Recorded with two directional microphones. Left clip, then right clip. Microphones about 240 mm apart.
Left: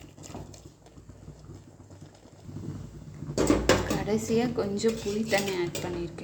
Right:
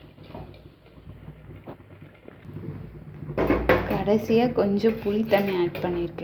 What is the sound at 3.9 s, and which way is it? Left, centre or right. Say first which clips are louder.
Speech: right 6 dB; centre.